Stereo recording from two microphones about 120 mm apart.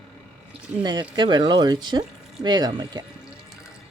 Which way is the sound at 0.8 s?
35° right (ahead or behind).